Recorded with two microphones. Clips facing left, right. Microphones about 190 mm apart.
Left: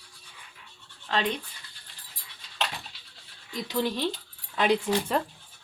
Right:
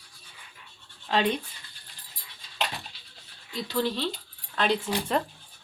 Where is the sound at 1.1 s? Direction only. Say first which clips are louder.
Right 3 dB; 10° right (ahead or behind).